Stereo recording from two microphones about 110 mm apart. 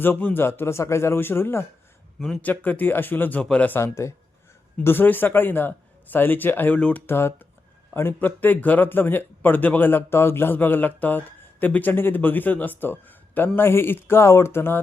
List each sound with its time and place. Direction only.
0.0 s a man's voice: 15° left (ahead or behind)
2.1 s speech: 5° left (ahead or behind)
2.4 s a man's voice: 15° left (ahead or behind)
3.8 s a man's voice: 25° left (ahead or behind)